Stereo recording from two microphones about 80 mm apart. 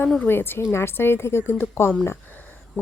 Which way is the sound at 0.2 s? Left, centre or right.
Left.